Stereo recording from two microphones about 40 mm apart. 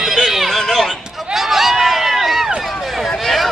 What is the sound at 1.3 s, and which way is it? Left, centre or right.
Run, centre.